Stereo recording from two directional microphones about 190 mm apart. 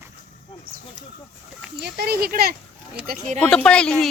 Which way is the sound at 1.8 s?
55° right (ahead or behind).